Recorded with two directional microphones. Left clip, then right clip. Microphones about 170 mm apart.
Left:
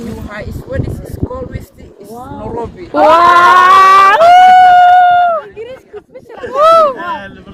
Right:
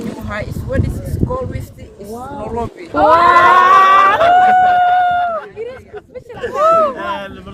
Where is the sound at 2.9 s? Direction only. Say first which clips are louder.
Left 3 dB; 70° left (ahead or behind); by 5.3 s 90° left.